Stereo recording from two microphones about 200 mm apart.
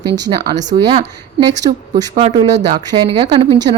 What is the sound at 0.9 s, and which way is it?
Speech, 30° right (ahead or behind).